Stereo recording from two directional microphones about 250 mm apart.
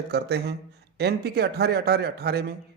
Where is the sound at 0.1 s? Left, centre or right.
Right.